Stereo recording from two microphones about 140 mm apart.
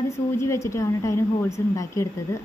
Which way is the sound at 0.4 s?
20° left (ahead or behind).